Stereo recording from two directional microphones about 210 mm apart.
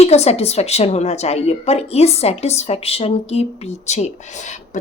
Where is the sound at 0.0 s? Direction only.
30° left (ahead or behind).